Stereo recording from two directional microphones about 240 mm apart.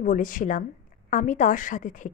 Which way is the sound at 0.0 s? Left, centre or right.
Left.